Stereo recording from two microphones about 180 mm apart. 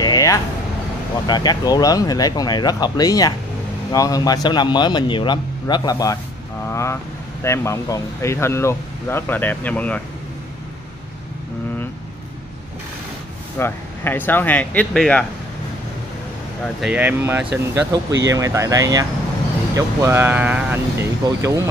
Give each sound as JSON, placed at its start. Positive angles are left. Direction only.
{"t": 0.0, "sound": "vehicle", "side_deg": 20}
{"t": 1.2, "sound": "a man's voice", "side_deg": 25}
{"t": 13.6, "sound": "speech", "side_deg": 10}
{"t": 16.8, "sound": "speech", "side_deg": -10}